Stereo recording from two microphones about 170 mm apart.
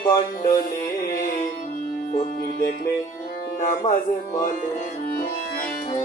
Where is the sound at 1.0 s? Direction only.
50° left (ahead or behind).